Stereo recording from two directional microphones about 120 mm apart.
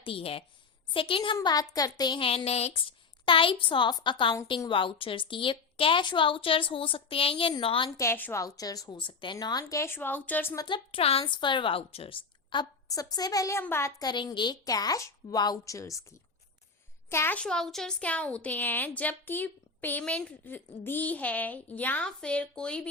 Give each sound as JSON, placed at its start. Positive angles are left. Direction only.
{"t": 0.0, "sound": "a woman's voice", "side_deg": 50}
{"t": 1.4, "sound": "a woman's voice", "side_deg": 30}
{"t": 3.2, "sound": "a woman's voice", "side_deg": 45}
{"t": 7.9, "sound": "a woman's voice", "side_deg": 20}
{"t": 9.0, "sound": "a woman's voice", "side_deg": 45}
{"t": 10.7, "sound": "a woman's voice", "side_deg": 55}
{"t": 14.0, "sound": "a woman's voice", "side_deg": 35}
{"t": 17.4, "sound": "a woman's voice", "side_deg": 5}